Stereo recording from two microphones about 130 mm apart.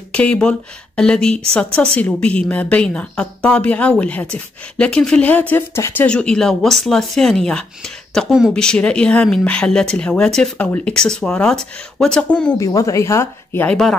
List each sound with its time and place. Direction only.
0.1 s speech: 10° left (ahead or behind)
6.0 s speech: 5° left (ahead or behind)
8.5 s speech: 5° left (ahead or behind)
12.5 s speech: 25° left (ahead or behind)